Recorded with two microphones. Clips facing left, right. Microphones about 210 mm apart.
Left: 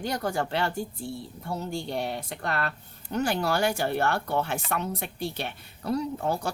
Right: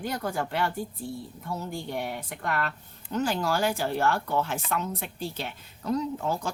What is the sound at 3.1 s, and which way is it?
Speech, 70° left (ahead or behind).